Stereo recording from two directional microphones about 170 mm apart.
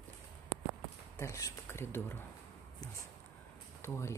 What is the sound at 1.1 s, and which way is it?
Speech, 15° left (ahead or behind).